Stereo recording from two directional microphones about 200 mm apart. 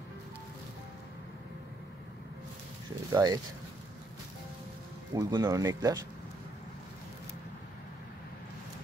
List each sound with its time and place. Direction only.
3.1 s speech: 15° right (ahead or behind)
5.1 s speech: 20° right (ahead or behind)